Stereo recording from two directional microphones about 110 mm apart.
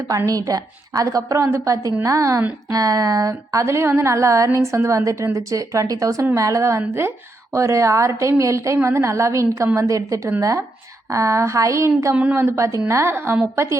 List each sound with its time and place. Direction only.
0.3 s a woman's voice: 35° right (ahead or behind)
12.1 s a woman's voice: 15° right (ahead or behind)
12.4 s speech: 25° right (ahead or behind)